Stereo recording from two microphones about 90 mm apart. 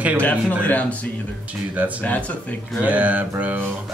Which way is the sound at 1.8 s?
15° right (ahead or behind).